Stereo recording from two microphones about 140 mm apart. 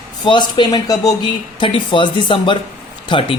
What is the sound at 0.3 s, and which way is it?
Speech, 35° left (ahead or behind).